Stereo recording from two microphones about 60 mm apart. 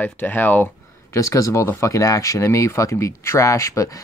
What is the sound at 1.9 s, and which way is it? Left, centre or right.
Speech, left.